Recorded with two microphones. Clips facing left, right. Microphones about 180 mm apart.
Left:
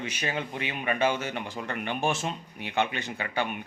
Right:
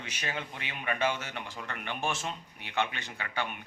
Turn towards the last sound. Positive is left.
turn(degrees=15)  # may be behind; listen again after turning